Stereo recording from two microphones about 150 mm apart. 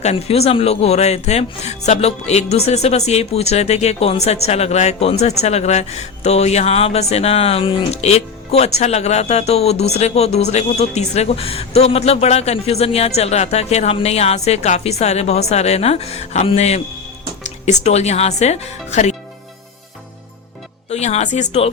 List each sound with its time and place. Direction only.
0.0 s a man's voice: 45° left (ahead or behind)
20.9 s a man's voice: 45° left (ahead or behind)